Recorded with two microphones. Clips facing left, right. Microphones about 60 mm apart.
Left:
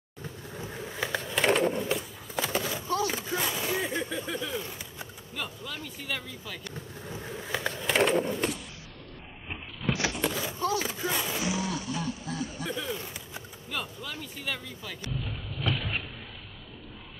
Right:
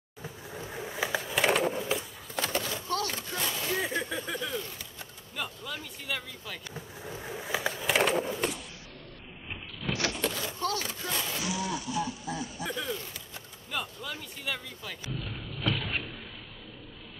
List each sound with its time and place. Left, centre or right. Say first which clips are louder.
0.2 s vehicle: left 1 dB; centre
0.6 s skateboard: right 1 dB; centre
3.8 s a sound: left 1 dB; centre
5.3 s speech: right 1 dB; centre
10.0 s skateboard: left 2 dB; centre; by 11.7 s left
11.7 s chuckle: right 1 dB; centre
12.9 s a sound: left 1 dB; centre
13.7 s speech: right 1 dB; centre
15.6 s a sound: even; centre